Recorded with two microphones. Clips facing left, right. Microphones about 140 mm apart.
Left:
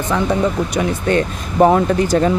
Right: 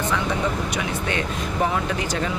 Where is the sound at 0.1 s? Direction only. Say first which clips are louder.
Left 11 dB; 40° left (ahead or behind).